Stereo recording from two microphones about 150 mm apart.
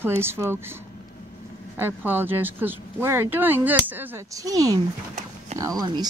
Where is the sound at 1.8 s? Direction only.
15° right (ahead or behind).